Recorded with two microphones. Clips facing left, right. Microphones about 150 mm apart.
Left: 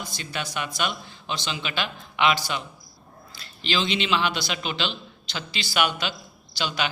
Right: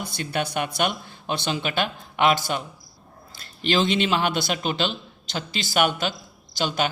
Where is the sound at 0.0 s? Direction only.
55° right (ahead or behind).